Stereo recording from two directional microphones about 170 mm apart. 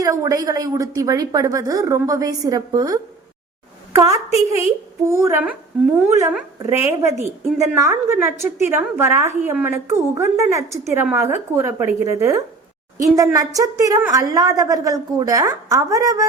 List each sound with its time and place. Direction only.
0.0 s a woman's voice: 20° right (ahead or behind)